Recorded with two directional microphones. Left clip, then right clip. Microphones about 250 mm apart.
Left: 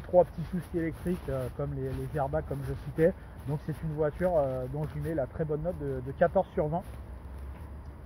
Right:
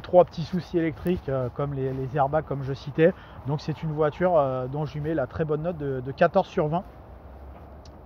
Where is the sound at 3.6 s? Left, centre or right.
Right.